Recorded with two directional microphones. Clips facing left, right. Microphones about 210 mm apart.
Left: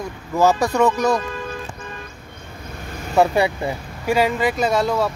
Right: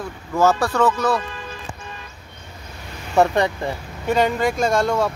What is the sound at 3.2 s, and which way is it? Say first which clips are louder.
Speech: left 1 dB; 10° left (ahead or behind).